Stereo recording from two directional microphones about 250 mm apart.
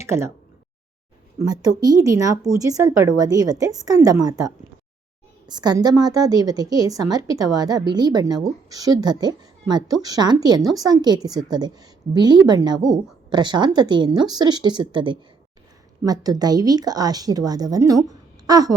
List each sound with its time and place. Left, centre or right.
0.0 s a woman's voice: centre
1.4 s a woman's voice: centre